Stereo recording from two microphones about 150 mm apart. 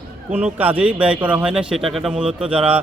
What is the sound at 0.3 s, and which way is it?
Speech, 10° right (ahead or behind).